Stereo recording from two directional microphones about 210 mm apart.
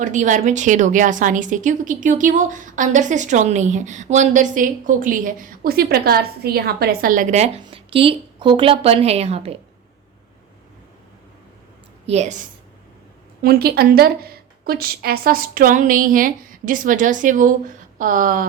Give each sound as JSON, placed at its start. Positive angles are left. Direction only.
{"t": 0.0, "sound": "a woman's voice", "side_deg": -35}
{"t": 12.0, "sound": "a woman's voice", "side_deg": -30}
{"t": 13.4, "sound": "a woman's voice", "side_deg": -45}